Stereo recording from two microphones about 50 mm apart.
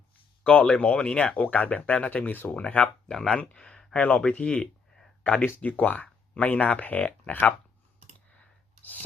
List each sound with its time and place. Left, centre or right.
0.4 s speech: centre
3.3 s speech: centre
3.9 s speech: left
4.2 s speech: centre
8.4 s a sound: left